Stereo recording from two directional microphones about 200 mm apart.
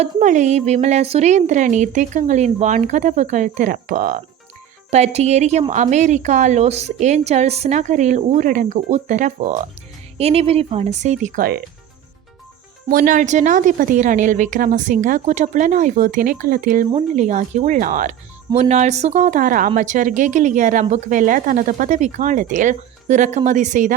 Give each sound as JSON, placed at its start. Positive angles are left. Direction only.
{"t": 0.0, "sound": "a woman's voice", "side_deg": -40}
{"t": 12.9, "sound": "a woman's voice", "side_deg": -40}